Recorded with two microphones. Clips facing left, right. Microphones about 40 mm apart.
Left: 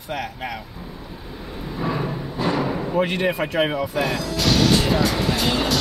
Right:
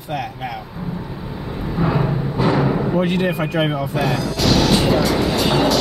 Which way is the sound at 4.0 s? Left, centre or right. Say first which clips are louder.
Right 4 dB; centre.